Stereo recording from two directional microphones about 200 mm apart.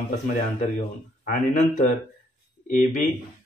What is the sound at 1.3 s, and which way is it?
Speech, 40° left (ahead or behind).